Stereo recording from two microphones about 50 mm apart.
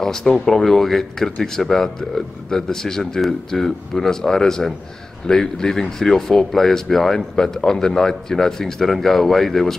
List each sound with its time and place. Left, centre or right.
0.0 s speech: centre